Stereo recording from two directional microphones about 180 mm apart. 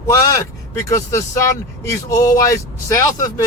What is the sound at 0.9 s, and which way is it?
Speech, 15° left (ahead or behind).